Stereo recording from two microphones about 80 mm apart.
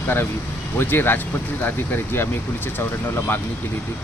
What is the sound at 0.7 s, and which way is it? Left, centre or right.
Speech, left.